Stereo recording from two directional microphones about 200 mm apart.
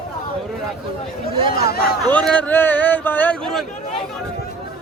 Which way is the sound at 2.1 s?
5° left (ahead or behind).